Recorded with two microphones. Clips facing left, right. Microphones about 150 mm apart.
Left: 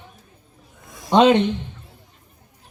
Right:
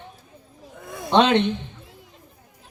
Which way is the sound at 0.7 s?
60° right (ahead or behind).